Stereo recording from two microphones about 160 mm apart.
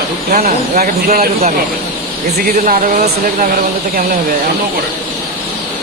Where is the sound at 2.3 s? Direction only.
55° right (ahead or behind).